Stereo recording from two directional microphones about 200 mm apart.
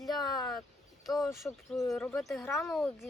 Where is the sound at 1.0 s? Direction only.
Centre (ahead or behind).